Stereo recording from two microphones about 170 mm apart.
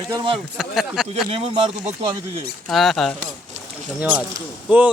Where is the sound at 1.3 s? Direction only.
35° right (ahead or behind).